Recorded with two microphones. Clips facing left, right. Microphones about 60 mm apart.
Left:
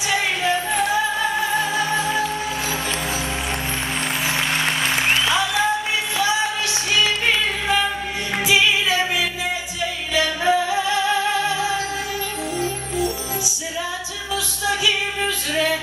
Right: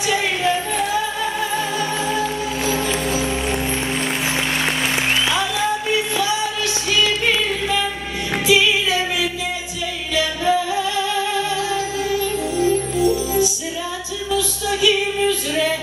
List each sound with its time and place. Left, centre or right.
1.5 s music: centre
4.6 s music: centre
5.9 s music: centre
8.5 s music: centre
10.1 s music: centre
14.3 s music: centre